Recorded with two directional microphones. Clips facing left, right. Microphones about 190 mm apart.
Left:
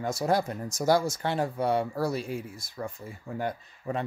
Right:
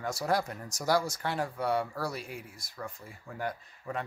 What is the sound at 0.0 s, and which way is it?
Speech, 25° left (ahead or behind).